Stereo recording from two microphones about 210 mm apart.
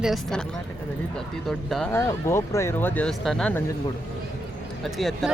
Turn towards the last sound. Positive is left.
turn(degrees=0)  # may be behind; listen again after turning